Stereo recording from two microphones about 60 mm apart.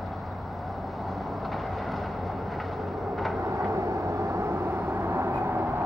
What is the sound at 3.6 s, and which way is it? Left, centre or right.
Vehicle, right.